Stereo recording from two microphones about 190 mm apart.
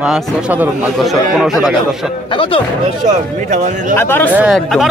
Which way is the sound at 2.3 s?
25° left (ahead or behind).